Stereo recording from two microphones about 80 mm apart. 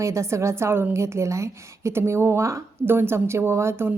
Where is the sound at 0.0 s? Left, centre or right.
Right.